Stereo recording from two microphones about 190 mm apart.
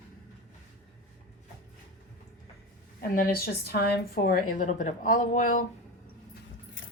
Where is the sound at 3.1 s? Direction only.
50° left (ahead or behind).